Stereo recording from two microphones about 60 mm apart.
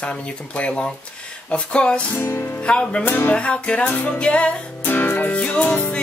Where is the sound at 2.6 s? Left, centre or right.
Centre.